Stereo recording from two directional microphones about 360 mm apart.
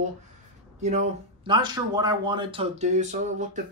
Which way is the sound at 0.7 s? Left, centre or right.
Centre.